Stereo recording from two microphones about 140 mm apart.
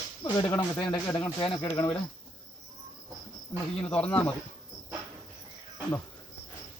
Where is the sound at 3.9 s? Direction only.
10° left (ahead or behind).